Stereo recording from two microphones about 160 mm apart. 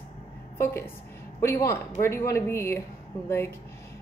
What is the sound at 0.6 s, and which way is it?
A woman's voice, 15° left (ahead or behind).